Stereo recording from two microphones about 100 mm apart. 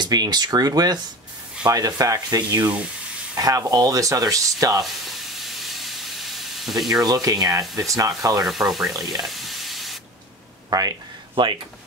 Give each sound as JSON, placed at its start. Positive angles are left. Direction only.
{"t": 0.0, "sound": "speech", "side_deg": -45}
{"t": 5.7, "sound": "steam", "side_deg": 0}
{"t": 7.1, "sound": "speech", "side_deg": -40}
{"t": 8.5, "sound": "speech", "side_deg": 0}
{"t": 8.9, "sound": "speech", "side_deg": -40}
{"t": 9.2, "sound": "frying", "side_deg": 0}
{"t": 10.7, "sound": "a sound", "side_deg": -40}